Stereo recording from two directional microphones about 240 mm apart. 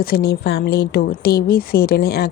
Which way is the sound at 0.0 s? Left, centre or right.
Left.